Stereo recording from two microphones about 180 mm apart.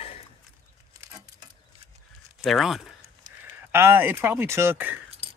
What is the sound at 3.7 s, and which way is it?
Speech, 15° right (ahead or behind).